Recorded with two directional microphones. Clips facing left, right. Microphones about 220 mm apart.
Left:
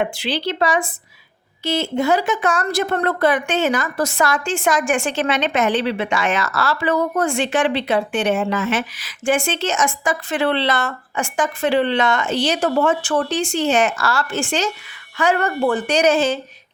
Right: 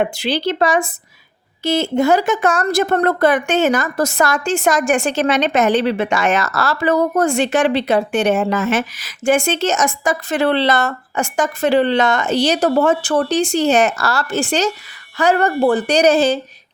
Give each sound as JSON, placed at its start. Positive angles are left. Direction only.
{"t": 0.0, "sound": "a woman's voice", "side_deg": -45}